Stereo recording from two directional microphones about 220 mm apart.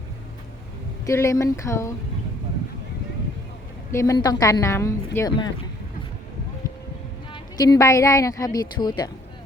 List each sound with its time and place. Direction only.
1.0 s a woman's voice: 15° left (ahead or behind)
3.9 s a woman's voice: 15° left (ahead or behind)
7.3 s a woman's voice: 15° left (ahead or behind)